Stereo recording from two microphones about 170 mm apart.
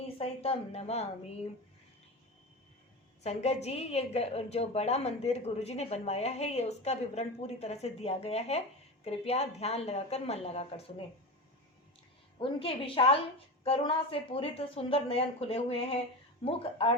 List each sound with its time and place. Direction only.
0.2 s a woman's voice: 35° left (ahead or behind)
3.2 s a woman's voice: 40° left (ahead or behind)
12.4 s a woman's voice: 35° left (ahead or behind)